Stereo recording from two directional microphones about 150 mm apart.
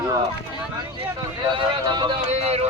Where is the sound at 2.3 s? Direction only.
45° right (ahead or behind).